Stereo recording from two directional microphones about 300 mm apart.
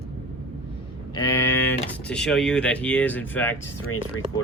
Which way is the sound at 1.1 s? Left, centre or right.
Centre.